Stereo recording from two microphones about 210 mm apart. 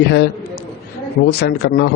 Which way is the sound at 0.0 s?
55° left (ahead or behind).